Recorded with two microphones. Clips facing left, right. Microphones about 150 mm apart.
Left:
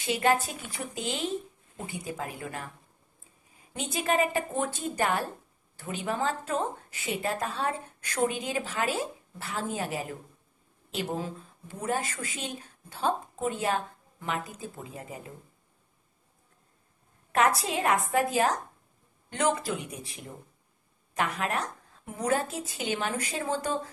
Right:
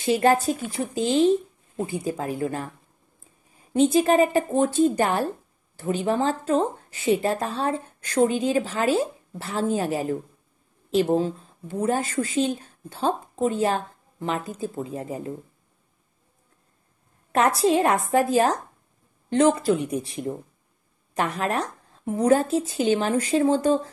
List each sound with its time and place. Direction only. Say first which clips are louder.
0.0 s a woman's voice: right 6 dB; 35° right (ahead or behind)
3.7 s a woman's voice: right 10 dB; 30° right (ahead or behind)
17.4 s a woman's voice: right 6 dB; 35° right (ahead or behind)